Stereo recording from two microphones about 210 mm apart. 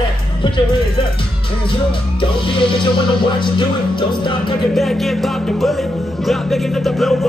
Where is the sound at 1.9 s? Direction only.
25° left (ahead or behind).